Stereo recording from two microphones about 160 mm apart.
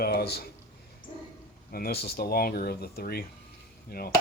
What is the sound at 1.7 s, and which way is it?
Speech, 70° left (ahead or behind).